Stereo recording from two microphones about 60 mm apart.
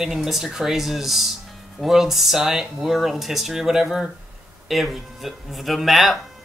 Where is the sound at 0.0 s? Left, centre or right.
Centre.